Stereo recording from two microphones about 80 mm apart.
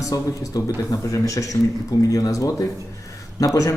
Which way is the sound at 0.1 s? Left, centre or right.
Left.